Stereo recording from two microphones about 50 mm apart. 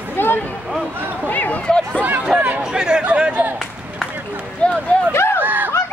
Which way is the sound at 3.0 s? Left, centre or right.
Right.